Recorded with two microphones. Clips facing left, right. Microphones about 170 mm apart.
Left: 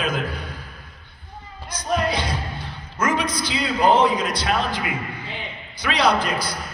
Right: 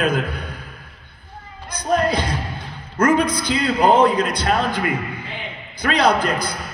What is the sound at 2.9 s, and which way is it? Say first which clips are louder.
A man's voice: right 6 dB; 55° right (ahead or behind).